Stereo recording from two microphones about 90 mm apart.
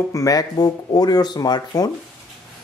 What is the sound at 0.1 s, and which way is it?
Speech, 40° left (ahead or behind).